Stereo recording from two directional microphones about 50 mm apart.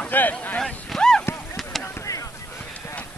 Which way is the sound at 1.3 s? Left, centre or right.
Left.